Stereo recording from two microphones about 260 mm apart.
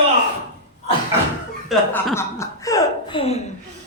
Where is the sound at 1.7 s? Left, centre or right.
Centre.